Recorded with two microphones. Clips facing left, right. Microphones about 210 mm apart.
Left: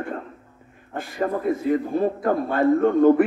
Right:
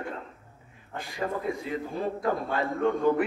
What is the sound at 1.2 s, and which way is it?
A man's voice, 50° left (ahead or behind).